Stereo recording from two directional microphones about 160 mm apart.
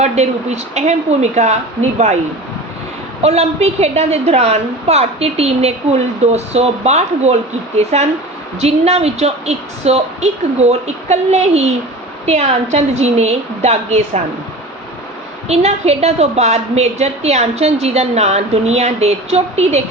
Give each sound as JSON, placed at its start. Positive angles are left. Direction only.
{"t": 0.0, "sound": "a woman's voice", "side_deg": -45}
{"t": 3.2, "sound": "a woman's voice", "side_deg": -40}
{"t": 15.4, "sound": "a woman's voice", "side_deg": -40}